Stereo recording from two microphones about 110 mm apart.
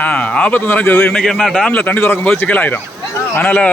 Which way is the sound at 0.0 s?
10° left (ahead or behind).